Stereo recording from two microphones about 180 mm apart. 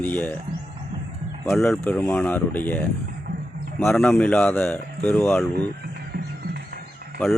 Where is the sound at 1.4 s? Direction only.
Centre (ahead or behind).